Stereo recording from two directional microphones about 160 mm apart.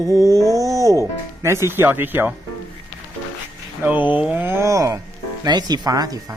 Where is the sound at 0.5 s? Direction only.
20° right (ahead or behind).